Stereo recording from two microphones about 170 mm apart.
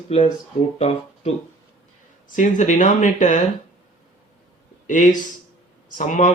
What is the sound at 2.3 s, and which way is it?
Speech, 45° left (ahead or behind).